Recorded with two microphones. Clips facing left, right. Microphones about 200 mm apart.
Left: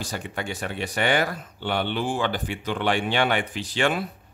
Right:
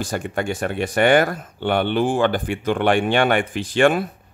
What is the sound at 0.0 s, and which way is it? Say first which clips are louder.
Speech: right 7 dB; 50° right (ahead or behind).